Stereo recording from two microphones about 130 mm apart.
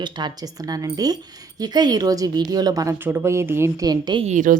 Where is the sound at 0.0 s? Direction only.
35° right (ahead or behind); by 3.8 s 20° right (ahead or behind).